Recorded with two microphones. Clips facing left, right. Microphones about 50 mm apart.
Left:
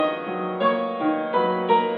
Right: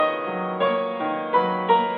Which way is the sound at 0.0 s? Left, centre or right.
Centre.